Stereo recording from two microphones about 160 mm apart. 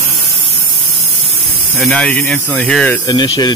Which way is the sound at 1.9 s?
10° left (ahead or behind).